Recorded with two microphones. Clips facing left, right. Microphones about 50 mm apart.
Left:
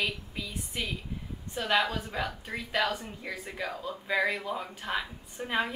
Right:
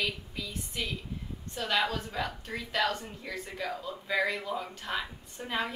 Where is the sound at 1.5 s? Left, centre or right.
Centre.